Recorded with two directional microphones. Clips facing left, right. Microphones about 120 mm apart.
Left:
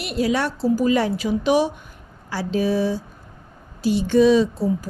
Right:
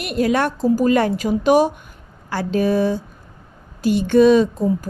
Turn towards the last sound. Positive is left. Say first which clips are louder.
# right 2 dB
turn(degrees=-50)  # may be behind; listen again after turning